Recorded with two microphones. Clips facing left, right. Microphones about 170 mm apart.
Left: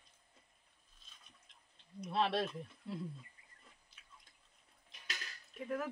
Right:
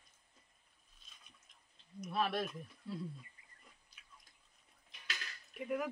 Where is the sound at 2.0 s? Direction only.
30° left (ahead or behind).